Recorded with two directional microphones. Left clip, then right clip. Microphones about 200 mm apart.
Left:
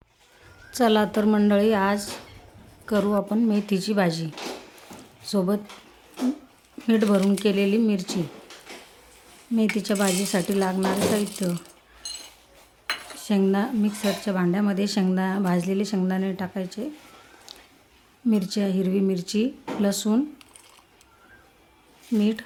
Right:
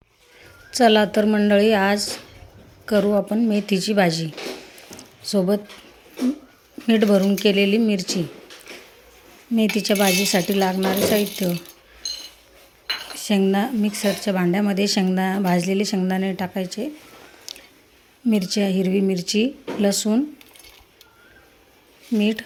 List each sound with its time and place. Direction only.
0.7 s speech: centre (ahead or behind)
6.8 s speech: 5° right (ahead or behind)
9.7 s speech: 5° right (ahead or behind)
12.0 s a sound: 40° left (ahead or behind)
13.1 s speech: centre (ahead or behind)
17.5 s a sound: centre (ahead or behind)
18.3 s speech: centre (ahead or behind)
22.1 s speech: centre (ahead or behind)